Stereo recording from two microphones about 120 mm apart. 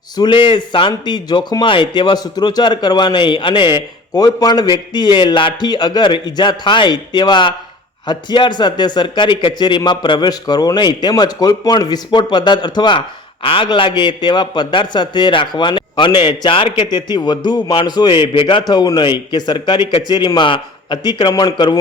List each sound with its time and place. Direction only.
0.2 s speech: 40° left (ahead or behind)